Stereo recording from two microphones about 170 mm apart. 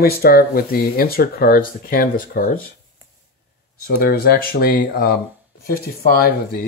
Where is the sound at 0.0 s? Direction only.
65° left (ahead or behind).